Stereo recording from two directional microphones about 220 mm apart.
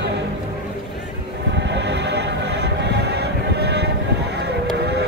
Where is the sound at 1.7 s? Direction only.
50° right (ahead or behind).